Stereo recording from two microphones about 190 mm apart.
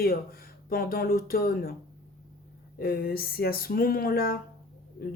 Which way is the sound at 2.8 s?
50° left (ahead or behind).